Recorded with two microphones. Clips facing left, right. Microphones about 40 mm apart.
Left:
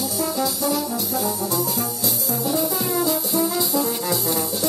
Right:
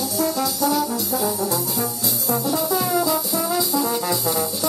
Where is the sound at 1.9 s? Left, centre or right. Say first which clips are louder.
Left 1 dB; left.